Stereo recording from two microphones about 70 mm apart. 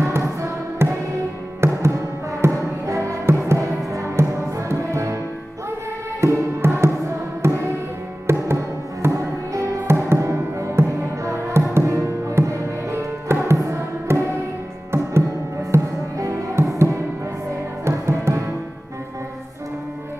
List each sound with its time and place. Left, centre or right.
0.0 s music: right
6.2 s music: right
9.1 s music: right
9.8 s music: right
15.7 s music: right